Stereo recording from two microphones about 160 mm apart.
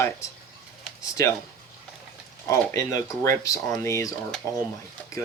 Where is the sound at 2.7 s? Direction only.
20° left (ahead or behind).